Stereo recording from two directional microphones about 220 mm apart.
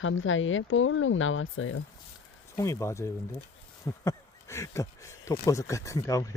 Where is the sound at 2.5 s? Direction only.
15° left (ahead or behind).